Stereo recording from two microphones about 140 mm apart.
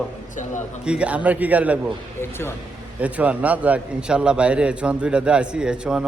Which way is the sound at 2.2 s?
15° left (ahead or behind).